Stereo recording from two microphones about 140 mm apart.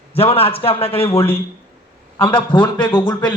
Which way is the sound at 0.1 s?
45° left (ahead or behind).